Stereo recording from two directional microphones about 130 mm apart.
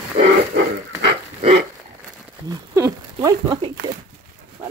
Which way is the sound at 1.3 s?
55° right (ahead or behind).